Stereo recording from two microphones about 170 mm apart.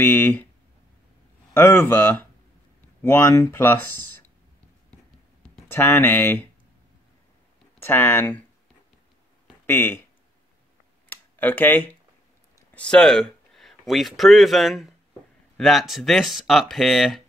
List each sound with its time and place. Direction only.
0.0 s speech: 10° left (ahead or behind)
1.5 s speech: 15° left (ahead or behind)
5.4 s speech: 10° left (ahead or behind)
7.8 s speech: 15° left (ahead or behind)
9.7 s speech: 10° left (ahead or behind)
11.1 s a sound: 10° left (ahead or behind)
12.7 s speech: 5° left (ahead or behind)